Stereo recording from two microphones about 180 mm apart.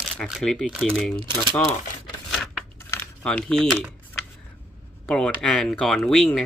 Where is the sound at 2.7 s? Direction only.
15° left (ahead or behind).